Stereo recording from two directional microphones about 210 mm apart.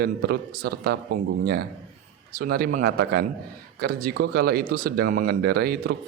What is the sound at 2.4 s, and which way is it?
A man's voice, 45° right (ahead or behind).